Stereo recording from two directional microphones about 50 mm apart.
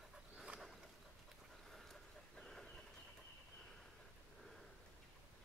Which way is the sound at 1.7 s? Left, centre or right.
Centre.